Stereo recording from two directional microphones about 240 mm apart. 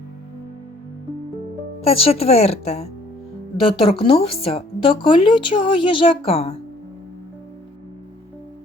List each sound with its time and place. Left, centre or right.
1.8 s speech: left